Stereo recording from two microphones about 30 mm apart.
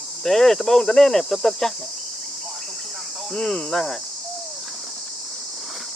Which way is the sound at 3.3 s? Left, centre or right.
Centre.